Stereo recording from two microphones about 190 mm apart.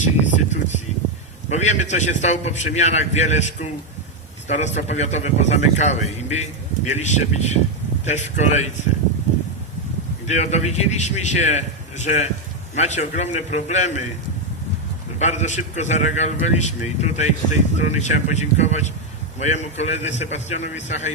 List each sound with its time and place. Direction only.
0.0 s vehicle: 35° left (ahead or behind)
1.5 s a man's voice: 35° left (ahead or behind)
10.2 s a man's voice: 35° left (ahead or behind)
15.2 s a man's voice: 40° left (ahead or behind)